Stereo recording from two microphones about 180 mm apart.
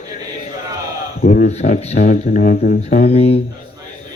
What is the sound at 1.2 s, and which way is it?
Speech, 45° left (ahead or behind).